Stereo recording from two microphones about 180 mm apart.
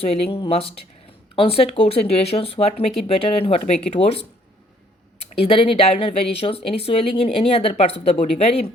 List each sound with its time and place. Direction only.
0.0 s speech: 35° left (ahead or behind)
5.3 s speech: 30° left (ahead or behind)